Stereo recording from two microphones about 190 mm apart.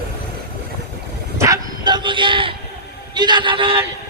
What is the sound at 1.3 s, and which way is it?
Bow-wow, 15° right (ahead or behind).